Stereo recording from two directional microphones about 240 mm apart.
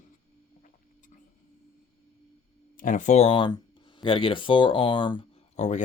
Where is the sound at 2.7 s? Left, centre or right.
Left.